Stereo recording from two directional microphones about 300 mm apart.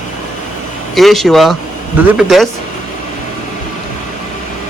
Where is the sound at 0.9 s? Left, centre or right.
Centre.